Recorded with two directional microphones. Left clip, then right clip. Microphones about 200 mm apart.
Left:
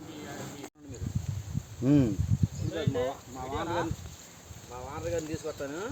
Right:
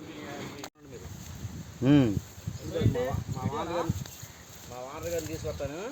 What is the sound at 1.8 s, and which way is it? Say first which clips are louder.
Speech: right 2 dB; 20° right (ahead or behind).